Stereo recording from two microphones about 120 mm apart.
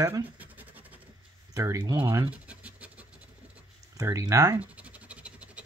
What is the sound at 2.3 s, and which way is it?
Scratch, 10° right (ahead or behind).